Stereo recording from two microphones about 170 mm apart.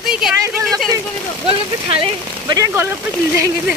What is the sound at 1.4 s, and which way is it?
Speech, 30° right (ahead or behind).